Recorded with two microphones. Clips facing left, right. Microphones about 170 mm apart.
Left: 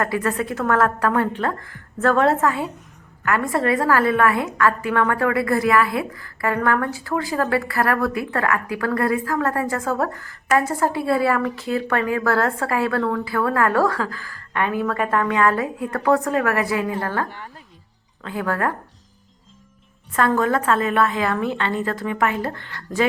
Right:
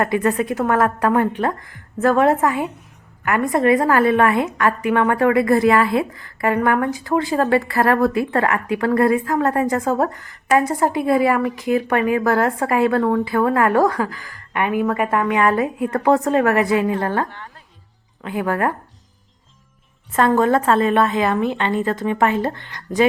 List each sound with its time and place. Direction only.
0.0 s a woman's voice: 20° right (ahead or behind)
20.1 s a woman's voice: 25° right (ahead or behind)